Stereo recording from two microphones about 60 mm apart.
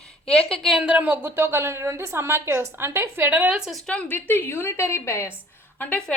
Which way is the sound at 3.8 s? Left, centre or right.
Centre.